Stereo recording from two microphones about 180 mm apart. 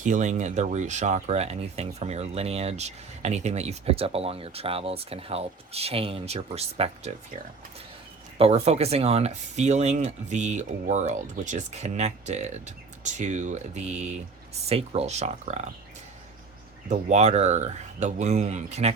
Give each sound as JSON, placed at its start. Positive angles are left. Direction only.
{"t": 0.0, "sound": "speech", "side_deg": -40}
{"t": 8.4, "sound": "speech", "side_deg": -35}
{"t": 16.9, "sound": "speech", "side_deg": -40}